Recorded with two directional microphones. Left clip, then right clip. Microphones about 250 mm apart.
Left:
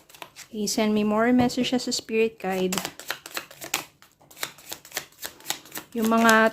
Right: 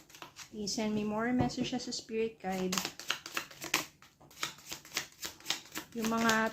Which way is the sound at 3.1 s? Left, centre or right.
Centre.